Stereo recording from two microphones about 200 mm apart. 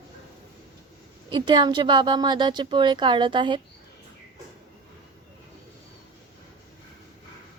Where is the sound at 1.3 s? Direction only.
20° right (ahead or behind).